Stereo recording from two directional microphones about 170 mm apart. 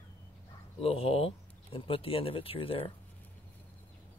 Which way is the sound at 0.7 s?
35° left (ahead or behind).